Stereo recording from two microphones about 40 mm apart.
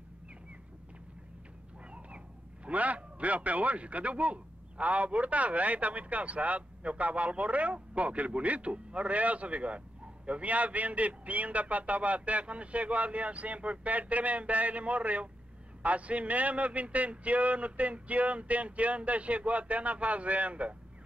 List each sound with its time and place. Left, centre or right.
1.9 s a man's voice: right